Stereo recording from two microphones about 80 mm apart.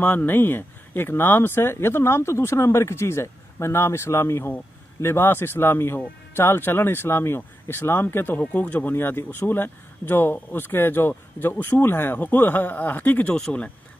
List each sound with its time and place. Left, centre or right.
0.0 s speech: left